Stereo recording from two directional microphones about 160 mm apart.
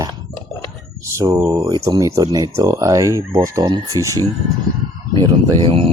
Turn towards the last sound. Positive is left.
turn(degrees=-25)  # may be behind; listen again after turning